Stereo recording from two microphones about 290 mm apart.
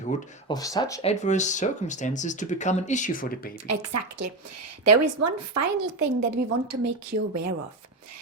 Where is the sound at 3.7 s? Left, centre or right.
Right.